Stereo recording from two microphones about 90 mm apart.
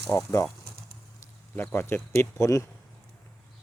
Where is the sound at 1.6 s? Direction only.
25° left (ahead or behind).